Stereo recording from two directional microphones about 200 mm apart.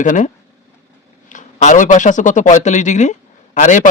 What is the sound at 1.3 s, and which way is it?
A man's voice, 40° left (ahead or behind).